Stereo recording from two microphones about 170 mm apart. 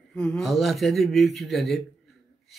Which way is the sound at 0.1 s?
5° left (ahead or behind).